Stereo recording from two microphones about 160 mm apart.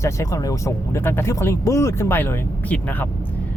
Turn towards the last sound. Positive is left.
turn(degrees=10)  # may be behind; listen again after turning